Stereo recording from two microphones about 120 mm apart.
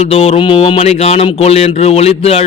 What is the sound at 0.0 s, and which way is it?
A man's voice, 60° left (ahead or behind).